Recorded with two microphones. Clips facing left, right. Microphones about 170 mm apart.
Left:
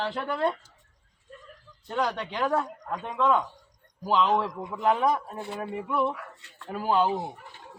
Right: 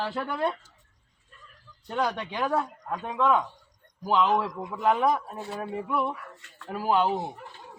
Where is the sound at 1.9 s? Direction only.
10° right (ahead or behind).